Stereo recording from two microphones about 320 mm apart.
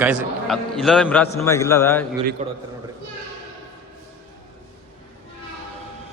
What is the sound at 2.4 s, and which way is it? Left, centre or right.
Speech, right.